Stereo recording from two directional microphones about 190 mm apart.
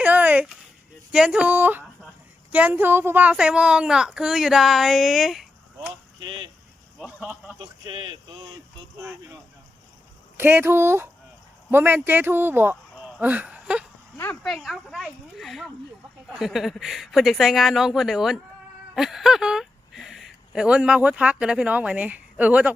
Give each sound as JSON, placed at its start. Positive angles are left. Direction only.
{"t": 0.0, "sound": "a sound", "side_deg": -10}
{"t": 1.1, "sound": "speech", "side_deg": -5}
{"t": 6.2, "sound": "a man's voice", "side_deg": -25}
{"t": 7.0, "sound": "speech", "side_deg": -5}
{"t": 7.6, "sound": "a man's voice", "side_deg": -25}
{"t": 9.0, "sound": "speech", "side_deg": -15}